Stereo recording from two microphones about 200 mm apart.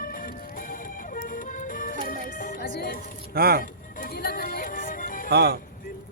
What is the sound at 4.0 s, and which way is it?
Music, 45° left (ahead or behind).